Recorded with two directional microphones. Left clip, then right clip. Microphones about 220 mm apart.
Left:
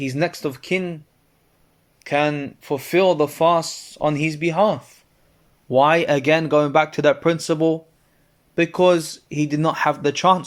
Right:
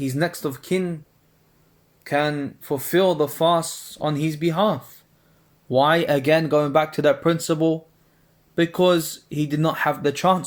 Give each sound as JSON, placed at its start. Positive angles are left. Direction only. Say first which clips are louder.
{"t": 0.0, "sound": "speech", "louder": "left 2 dB", "side_deg": 20}
{"t": 2.0, "sound": "speech", "louder": "left 2 dB", "side_deg": 30}